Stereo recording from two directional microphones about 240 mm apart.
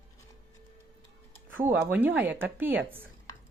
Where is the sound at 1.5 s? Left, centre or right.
Centre.